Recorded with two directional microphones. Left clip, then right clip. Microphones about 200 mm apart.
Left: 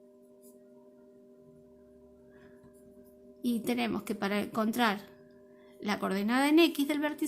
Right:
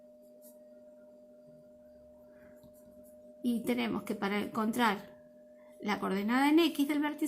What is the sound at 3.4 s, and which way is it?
A woman's voice, 35° left (ahead or behind).